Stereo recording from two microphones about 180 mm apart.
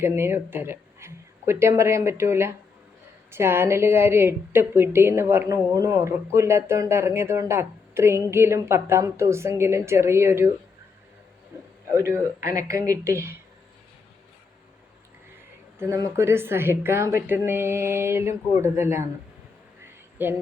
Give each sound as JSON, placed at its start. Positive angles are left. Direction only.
{"t": 0.0, "sound": "a woman's voice", "side_deg": -15}
{"t": 11.5, "sound": "a man's voice", "side_deg": -15}
{"t": 15.8, "sound": "a woman's voice", "side_deg": -15}
{"t": 19.8, "sound": "a sound", "side_deg": -10}